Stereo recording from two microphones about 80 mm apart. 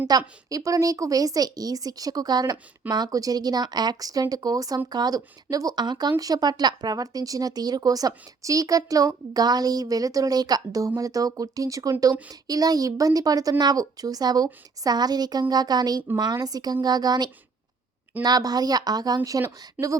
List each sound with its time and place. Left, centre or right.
0.1 s speech: right
19.8 s speech: centre